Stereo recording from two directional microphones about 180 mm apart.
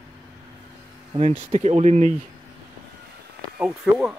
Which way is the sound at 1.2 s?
35° right (ahead or behind).